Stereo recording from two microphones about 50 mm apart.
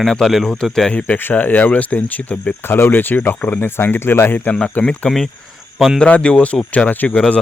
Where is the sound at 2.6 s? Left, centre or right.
Left.